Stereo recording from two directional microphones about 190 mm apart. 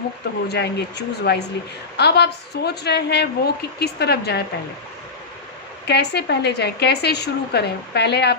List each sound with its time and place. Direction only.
0.4 s a woman's voice: 60° left (ahead or behind)
5.8 s a woman's voice: 60° left (ahead or behind)